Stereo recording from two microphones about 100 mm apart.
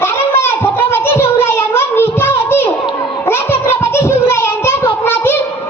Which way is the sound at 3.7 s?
25° left (ahead or behind).